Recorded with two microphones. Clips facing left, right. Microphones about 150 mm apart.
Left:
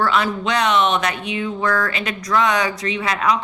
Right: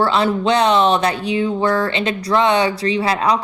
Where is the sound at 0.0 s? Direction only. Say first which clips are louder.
Right 3 dB; 30° right (ahead or behind).